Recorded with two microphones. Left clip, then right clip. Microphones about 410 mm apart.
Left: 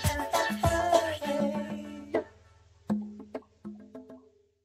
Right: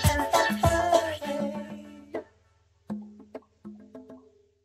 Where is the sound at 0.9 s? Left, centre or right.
Centre.